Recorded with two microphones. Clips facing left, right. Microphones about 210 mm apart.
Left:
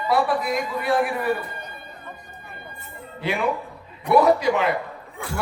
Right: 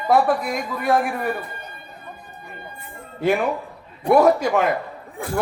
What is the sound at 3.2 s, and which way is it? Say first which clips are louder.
A man's voice: right 4 dB; 45° right (ahead or behind).